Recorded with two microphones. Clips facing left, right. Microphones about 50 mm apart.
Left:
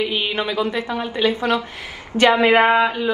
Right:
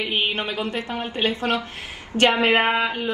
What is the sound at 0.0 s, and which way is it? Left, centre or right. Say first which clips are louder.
A woman's voice: left 2 dB; right.